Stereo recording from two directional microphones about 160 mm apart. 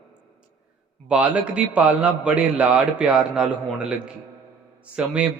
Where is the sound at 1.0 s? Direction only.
5° right (ahead or behind).